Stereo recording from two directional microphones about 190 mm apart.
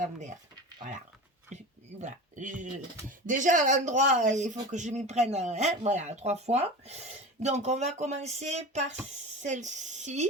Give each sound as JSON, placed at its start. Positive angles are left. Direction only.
{"t": 1.5, "sound": "speech", "side_deg": -40}